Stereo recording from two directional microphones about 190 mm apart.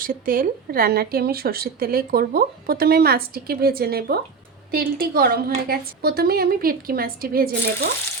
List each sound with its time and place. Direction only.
0.0 s speech: 50° right (ahead or behind)